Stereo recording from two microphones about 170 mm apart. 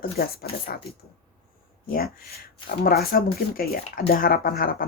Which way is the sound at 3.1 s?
60° left (ahead or behind).